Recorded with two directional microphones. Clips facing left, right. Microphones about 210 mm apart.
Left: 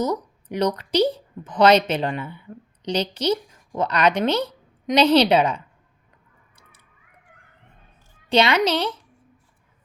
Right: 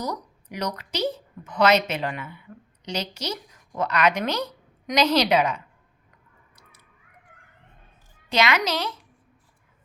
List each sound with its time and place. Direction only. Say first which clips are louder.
0.0 s a woman's voice: left 7 dB; 30° left (ahead or behind)
8.3 s a woman's voice: left 5 dB; 30° left (ahead or behind)